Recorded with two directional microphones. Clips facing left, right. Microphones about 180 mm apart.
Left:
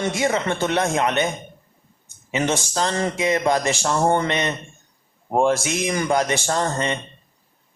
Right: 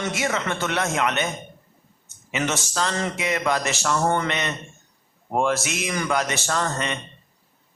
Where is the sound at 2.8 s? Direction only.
30° left (ahead or behind).